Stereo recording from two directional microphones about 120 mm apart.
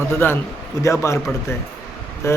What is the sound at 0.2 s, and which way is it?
Speech, 20° left (ahead or behind).